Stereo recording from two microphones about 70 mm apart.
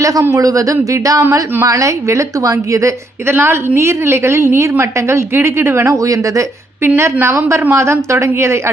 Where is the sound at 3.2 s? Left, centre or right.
Right.